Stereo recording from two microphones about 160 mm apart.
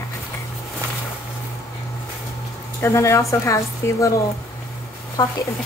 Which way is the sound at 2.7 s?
20° left (ahead or behind).